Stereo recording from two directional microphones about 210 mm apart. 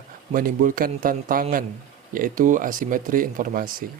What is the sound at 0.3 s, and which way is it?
Speech, 40° right (ahead or behind).